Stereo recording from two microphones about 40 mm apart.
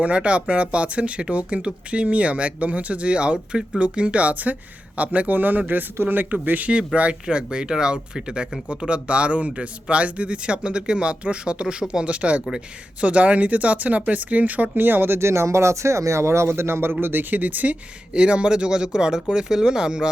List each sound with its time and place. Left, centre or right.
0.0 s speech: right
6.7 s speech: right
14.8 s speech: right
15.8 s speech: right
17.3 s speech: right
18.1 s speech: right